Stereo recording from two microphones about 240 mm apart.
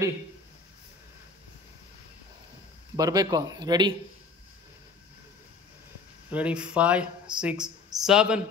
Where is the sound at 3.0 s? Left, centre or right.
Centre.